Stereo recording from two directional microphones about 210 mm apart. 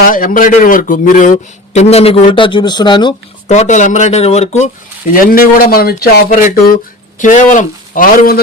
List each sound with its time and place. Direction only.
0.0 s a man's voice: 40° left (ahead or behind); by 3.2 s 20° left (ahead or behind)
3.5 s a man's voice: 35° left (ahead or behind)
5.1 s a man's voice: 45° left (ahead or behind)